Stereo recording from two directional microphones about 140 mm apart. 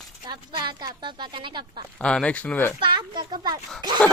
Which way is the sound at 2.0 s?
5° left (ahead or behind).